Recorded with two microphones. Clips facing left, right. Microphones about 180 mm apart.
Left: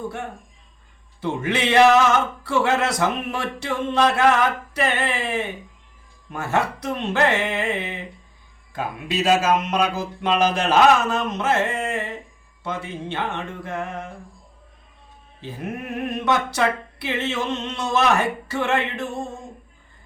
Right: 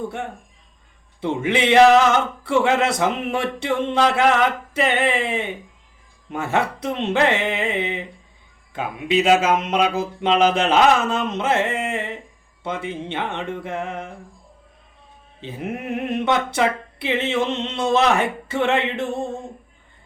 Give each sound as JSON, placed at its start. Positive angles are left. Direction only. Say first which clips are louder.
{"t": 1.2, "sound": "speech", "louder": "right 3 dB", "side_deg": -20}
{"t": 15.4, "sound": "speech", "louder": "right 2 dB", "side_deg": -20}